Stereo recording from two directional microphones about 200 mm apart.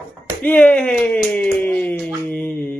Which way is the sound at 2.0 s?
5° left (ahead or behind).